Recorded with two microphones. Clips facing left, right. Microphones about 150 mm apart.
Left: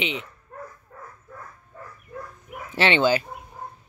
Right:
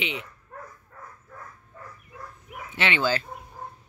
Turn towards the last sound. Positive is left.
turn(degrees=15)  # may be behind; listen again after turning